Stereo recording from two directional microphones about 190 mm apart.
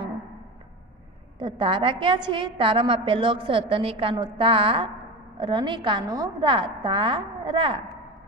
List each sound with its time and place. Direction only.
1.4 s a woman's voice: 25° right (ahead or behind)